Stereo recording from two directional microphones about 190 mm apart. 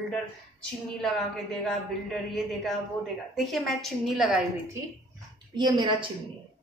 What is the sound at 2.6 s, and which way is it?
A woman's voice, centre (ahead or behind).